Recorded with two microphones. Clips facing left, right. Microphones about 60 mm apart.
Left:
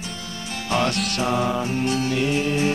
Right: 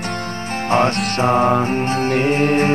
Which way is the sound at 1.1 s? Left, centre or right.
Right.